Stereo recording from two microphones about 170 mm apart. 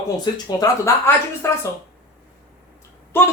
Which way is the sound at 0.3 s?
25° left (ahead or behind).